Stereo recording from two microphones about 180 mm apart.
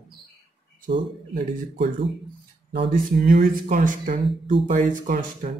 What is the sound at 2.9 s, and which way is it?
Speech, 50° right (ahead or behind).